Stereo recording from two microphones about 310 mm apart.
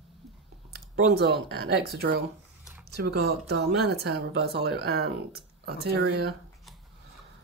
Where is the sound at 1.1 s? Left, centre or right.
Right.